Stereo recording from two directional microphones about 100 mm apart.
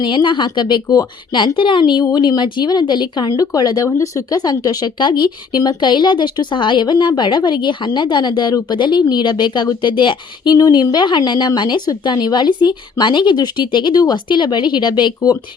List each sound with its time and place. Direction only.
0.0 s speech: 50° left (ahead or behind)